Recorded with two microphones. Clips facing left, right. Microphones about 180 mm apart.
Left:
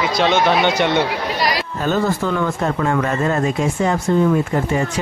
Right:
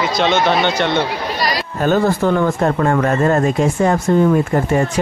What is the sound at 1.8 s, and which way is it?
Speech, 50° right (ahead or behind).